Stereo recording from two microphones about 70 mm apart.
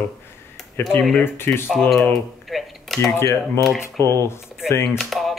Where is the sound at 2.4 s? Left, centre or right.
Centre.